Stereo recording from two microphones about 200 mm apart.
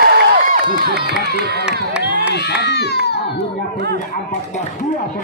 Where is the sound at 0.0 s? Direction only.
50° right (ahead or behind).